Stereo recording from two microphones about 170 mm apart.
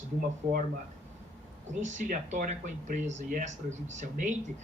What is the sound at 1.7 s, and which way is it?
Speech, 45° right (ahead or behind).